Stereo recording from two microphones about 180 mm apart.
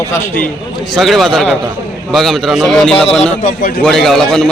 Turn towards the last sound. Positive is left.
turn(degrees=0)  # may be behind; listen again after turning